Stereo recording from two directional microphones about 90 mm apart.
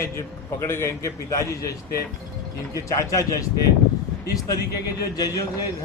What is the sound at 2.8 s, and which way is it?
Speech, 35° left (ahead or behind).